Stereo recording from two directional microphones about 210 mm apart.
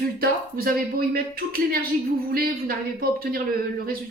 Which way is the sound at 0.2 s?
45° right (ahead or behind).